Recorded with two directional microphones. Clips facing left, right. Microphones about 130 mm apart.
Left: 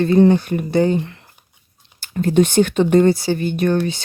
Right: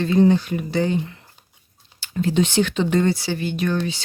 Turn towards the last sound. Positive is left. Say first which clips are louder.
# left 5 dB
turn(degrees=50)  # may be behind; listen again after turning